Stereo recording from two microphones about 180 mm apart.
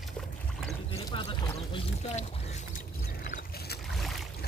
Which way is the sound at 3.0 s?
50° left (ahead or behind).